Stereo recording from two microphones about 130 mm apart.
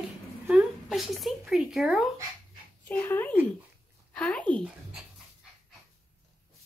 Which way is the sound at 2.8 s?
10° left (ahead or behind).